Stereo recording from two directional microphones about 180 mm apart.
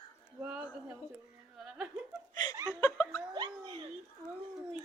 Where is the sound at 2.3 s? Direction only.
25° left (ahead or behind).